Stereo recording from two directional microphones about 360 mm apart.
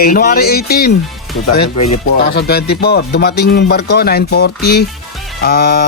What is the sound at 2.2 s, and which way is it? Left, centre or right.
Speech, left.